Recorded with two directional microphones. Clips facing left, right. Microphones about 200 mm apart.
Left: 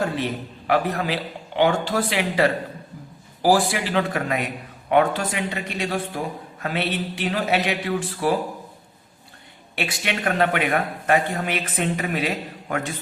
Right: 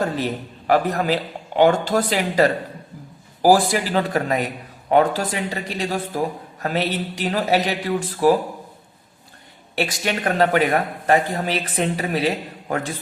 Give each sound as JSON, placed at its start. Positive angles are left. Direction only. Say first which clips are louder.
{"t": 0.7, "sound": "a man's voice", "louder": "right 3 dB", "side_deg": -45}
{"t": 9.7, "sound": "a man's voice", "louder": "right 4 dB", "side_deg": -40}